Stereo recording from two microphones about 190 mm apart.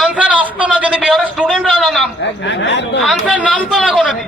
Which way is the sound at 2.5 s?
70° left (ahead or behind).